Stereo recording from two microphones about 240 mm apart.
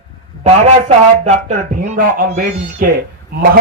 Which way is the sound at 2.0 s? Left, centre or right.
Right.